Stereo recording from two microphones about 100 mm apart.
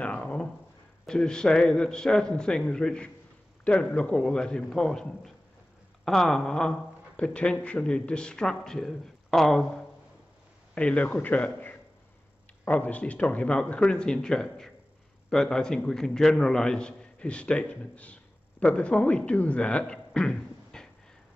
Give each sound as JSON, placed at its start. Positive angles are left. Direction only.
{"t": 0.0, "sound": "a sound", "side_deg": 10}
{"t": 1.0, "sound": "a man's voice", "side_deg": 5}
{"t": 10.7, "sound": "a man's voice", "side_deg": 15}